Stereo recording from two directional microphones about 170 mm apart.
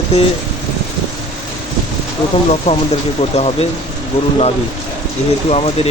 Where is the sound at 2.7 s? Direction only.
40° left (ahead or behind).